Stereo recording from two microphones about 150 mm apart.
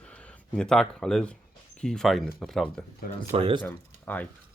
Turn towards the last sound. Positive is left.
turn(degrees=10)  # may be behind; listen again after turning